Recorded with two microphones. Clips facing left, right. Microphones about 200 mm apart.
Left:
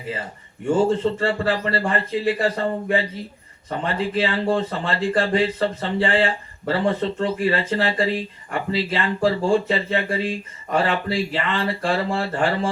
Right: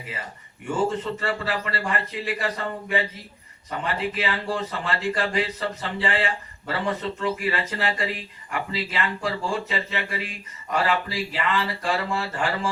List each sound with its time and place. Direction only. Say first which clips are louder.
0.1 s speech: left 9 dB; 30° left (ahead or behind)